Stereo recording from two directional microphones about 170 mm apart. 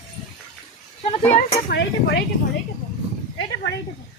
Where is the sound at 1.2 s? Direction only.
10° left (ahead or behind).